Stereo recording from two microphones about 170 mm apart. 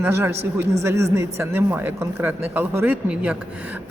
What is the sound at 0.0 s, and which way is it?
A woman's voice, 15° right (ahead or behind).